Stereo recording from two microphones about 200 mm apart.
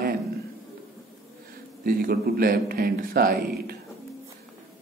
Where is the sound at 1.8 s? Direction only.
50° right (ahead or behind).